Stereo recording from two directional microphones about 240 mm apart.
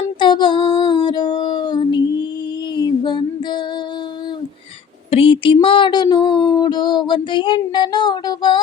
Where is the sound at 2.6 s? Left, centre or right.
Centre.